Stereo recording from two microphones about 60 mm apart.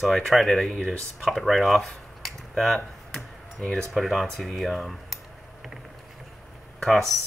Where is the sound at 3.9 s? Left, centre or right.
Centre.